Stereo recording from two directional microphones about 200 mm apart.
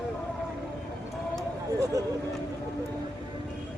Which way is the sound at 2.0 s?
20° right (ahead or behind).